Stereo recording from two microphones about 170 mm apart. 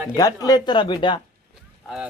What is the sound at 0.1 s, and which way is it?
Speech, 20° left (ahead or behind).